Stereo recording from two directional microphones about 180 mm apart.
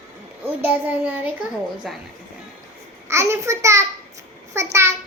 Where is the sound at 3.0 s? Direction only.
15° right (ahead or behind).